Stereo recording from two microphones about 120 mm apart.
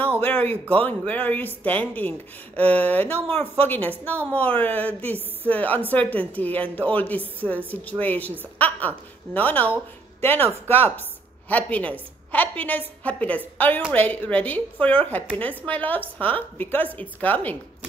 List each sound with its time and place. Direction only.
0.0 s a woman's voice: 15° left (ahead or behind)